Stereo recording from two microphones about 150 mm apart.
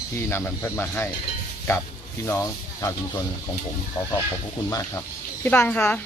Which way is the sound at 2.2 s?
20° left (ahead or behind).